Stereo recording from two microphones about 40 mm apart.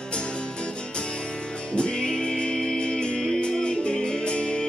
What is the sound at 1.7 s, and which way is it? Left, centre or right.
Music, left.